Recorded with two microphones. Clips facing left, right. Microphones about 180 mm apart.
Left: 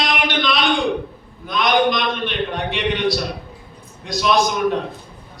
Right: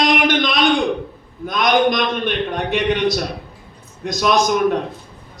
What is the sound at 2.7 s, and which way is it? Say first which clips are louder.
A man's voice: right 3 dB; 45° right (ahead or behind).